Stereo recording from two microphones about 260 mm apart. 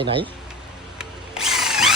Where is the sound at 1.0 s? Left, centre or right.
Centre.